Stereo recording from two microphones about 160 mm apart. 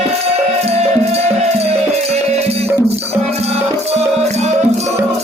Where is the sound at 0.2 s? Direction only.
40° right (ahead or behind).